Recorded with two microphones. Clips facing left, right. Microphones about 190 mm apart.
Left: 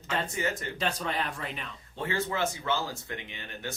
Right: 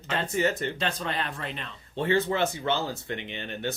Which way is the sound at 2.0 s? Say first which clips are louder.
Right 6 dB; 70° right (ahead or behind).